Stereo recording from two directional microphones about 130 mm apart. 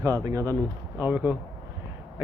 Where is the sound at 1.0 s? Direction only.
15° right (ahead or behind).